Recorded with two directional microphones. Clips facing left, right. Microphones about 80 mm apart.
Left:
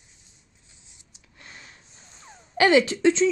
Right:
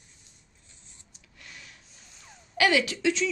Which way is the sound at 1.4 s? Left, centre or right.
Left.